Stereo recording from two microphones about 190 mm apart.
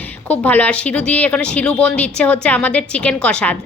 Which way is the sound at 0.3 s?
10° left (ahead or behind).